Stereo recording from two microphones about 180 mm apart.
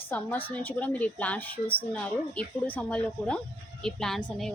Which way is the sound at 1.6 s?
30° left (ahead or behind).